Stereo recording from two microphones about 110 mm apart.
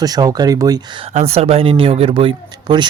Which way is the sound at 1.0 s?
80° right.